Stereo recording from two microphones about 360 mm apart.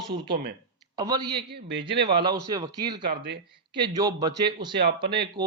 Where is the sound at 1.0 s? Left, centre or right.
Centre.